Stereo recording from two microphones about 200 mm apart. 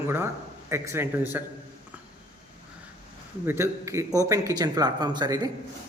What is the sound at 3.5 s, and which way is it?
Speech, 15° right (ahead or behind).